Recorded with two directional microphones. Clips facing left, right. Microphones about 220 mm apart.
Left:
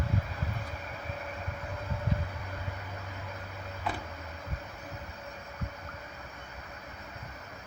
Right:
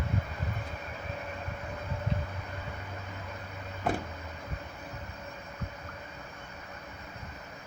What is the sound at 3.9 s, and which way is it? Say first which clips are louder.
Vehicle: right 6 dB; 45° right (ahead or behind).